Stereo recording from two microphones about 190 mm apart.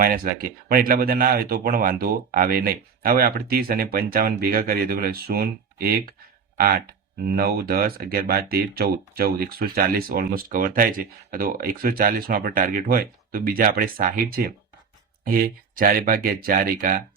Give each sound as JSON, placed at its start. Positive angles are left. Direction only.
{"t": 0.0, "sound": "speech", "side_deg": -50}